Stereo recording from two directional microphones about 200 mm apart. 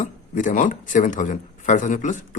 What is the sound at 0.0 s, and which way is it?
Speech, 40° left (ahead or behind).